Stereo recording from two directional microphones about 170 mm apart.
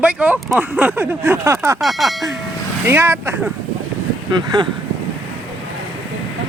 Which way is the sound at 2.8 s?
15° right (ahead or behind).